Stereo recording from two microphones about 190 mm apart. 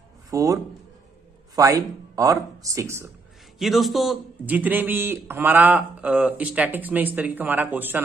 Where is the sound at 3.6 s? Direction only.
Centre (ahead or behind).